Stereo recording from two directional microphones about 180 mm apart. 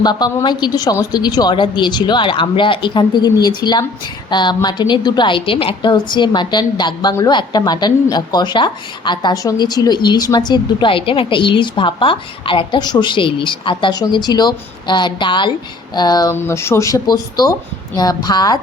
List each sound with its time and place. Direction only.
0.0 s a woman's voice: 20° left (ahead or behind)